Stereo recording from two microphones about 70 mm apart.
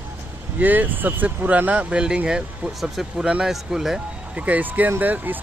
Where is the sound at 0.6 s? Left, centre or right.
Right; by 3.9 s centre.